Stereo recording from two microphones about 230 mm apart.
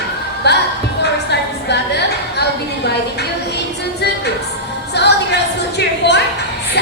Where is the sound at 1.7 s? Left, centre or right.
Left.